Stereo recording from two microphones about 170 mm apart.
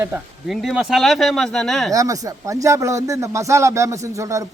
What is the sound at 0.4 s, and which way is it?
Speech, centre (ahead or behind).